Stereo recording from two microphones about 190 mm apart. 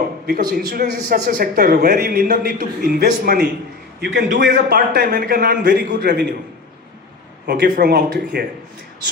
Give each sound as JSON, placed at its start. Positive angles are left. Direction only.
{"t": 0.3, "sound": "a man's voice", "side_deg": -50}
{"t": 7.4, "sound": "a man's voice", "side_deg": -55}